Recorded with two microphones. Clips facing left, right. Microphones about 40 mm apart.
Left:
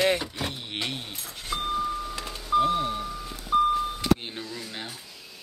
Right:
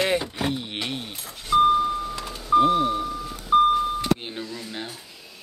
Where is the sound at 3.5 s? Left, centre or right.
Right.